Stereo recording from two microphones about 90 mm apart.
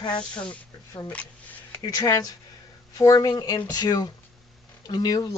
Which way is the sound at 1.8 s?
45° left (ahead or behind).